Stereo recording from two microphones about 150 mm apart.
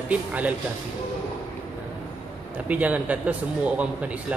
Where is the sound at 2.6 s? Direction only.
10° right (ahead or behind).